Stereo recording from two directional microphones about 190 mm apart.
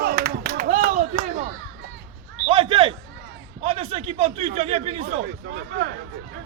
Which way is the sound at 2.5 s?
30° right (ahead or behind).